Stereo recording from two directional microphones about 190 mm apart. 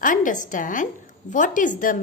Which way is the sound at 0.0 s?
45° left (ahead or behind).